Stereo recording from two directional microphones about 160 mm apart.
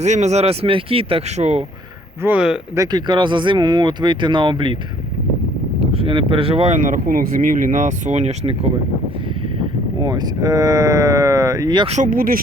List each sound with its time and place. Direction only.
0.0 s speech: 45° right (ahead or behind)
2.2 s speech: 5° right (ahead or behind)
2.7 s speech: 25° right (ahead or behind)
5.8 s speech: 35° right (ahead or behind)
10.0 s speech: 25° right (ahead or behind)
11.9 s speech: 50° right (ahead or behind)